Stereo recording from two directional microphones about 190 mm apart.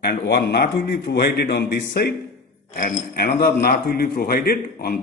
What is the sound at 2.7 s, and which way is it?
A man's voice, 45° left (ahead or behind).